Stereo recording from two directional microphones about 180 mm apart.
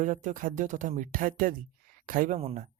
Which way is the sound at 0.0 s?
45° right (ahead or behind).